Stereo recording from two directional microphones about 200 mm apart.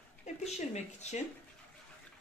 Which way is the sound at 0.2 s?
35° left (ahead or behind).